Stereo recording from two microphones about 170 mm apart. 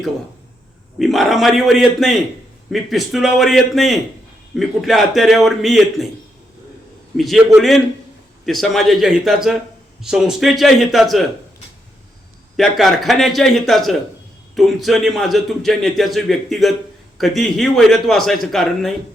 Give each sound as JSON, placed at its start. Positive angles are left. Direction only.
{"t": 0.9, "sound": "a man's voice", "side_deg": 0}
{"t": 7.2, "sound": "a man's voice", "side_deg": 0}
{"t": 12.5, "sound": "a man's voice", "side_deg": 0}